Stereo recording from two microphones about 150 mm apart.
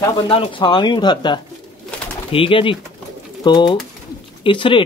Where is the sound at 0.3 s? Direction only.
35° left (ahead or behind).